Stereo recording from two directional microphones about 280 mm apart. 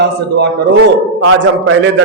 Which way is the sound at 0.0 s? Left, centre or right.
Right.